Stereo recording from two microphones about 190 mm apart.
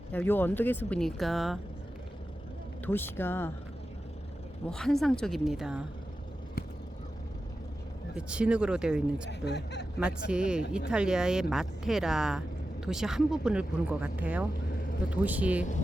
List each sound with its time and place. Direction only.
0.1 s speech: 10° left (ahead or behind)
2.8 s speech: 10° left (ahead or behind)
4.7 s speech: centre (ahead or behind)
8.1 s speech: 5° right (ahead or behind)
9.5 s speech: 65° left (ahead or behind)
10.0 s speech: 5° right (ahead or behind)